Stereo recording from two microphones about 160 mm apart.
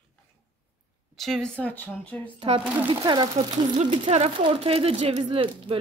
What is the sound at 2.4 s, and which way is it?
Speech, 35° right (ahead or behind).